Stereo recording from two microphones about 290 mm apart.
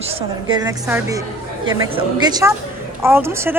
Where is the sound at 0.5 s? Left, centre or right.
Centre.